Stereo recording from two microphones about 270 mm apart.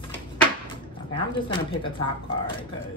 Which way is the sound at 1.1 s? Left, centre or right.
Centre.